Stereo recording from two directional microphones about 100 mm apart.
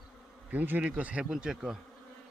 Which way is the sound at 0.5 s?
20° right (ahead or behind).